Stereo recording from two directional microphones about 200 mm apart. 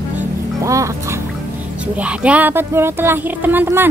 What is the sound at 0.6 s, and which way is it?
Duck, 15° right (ahead or behind).